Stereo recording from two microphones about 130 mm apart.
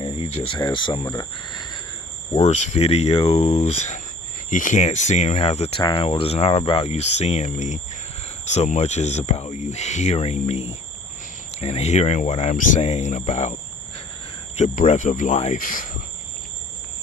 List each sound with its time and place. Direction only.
0.0 s speech: 40° left (ahead or behind)
2.4 s speech: 60° left (ahead or behind)
4.4 s speech: 80° left
15.5 s speech: 90° left